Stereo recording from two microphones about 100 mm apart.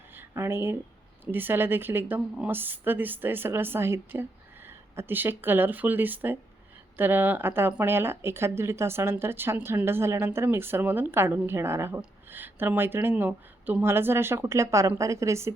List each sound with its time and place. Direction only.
0.1 s speech: 25° right (ahead or behind)